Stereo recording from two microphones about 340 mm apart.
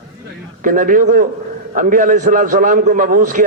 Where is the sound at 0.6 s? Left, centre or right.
Right.